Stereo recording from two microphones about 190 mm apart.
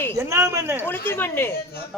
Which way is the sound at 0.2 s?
15° right (ahead or behind).